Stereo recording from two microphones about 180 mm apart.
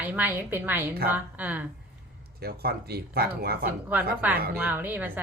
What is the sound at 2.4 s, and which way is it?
Speech, 60° right (ahead or behind).